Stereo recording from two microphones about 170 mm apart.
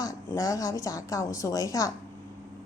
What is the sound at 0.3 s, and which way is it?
A woman's voice, 20° left (ahead or behind).